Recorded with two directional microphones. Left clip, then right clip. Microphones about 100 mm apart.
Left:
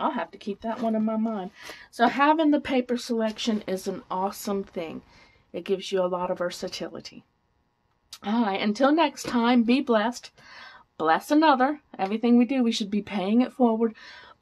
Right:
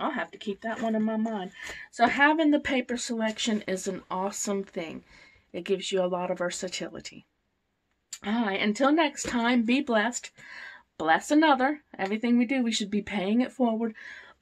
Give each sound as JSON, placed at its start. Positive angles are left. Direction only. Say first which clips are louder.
{"t": 0.0, "sound": "a woman's voice", "louder": "left 3 dB", "side_deg": 25}